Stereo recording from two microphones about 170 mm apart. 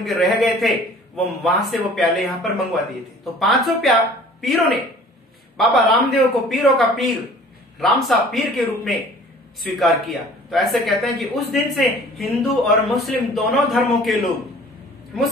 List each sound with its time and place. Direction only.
0.0 s speech: centre (ahead or behind)